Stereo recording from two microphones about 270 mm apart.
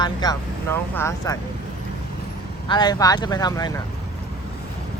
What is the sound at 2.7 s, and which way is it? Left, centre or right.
Speech, centre.